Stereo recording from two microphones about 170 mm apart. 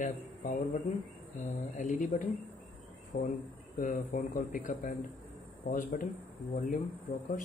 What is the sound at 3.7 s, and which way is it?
Speech, 50° left (ahead or behind).